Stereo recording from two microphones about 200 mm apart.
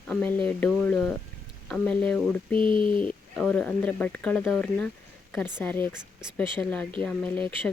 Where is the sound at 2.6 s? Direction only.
45° left (ahead or behind).